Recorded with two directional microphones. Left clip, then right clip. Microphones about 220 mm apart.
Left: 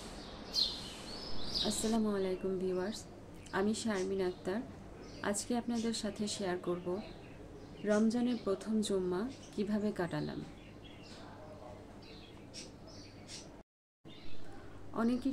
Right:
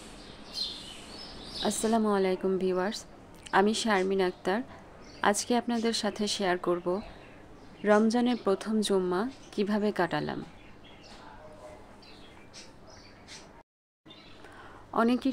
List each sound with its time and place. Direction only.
1.7 s a woman's voice: 45° right (ahead or behind)
7.8 s a woman's voice: 45° right (ahead or behind)
15.0 s a woman's voice: 45° right (ahead or behind)